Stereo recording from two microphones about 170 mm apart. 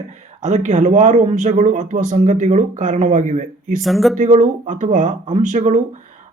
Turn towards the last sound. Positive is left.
turn(degrees=-45)  # may be behind; listen again after turning